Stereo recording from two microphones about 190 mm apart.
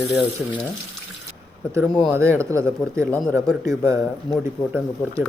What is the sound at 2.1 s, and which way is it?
Speech, 15° right (ahead or behind).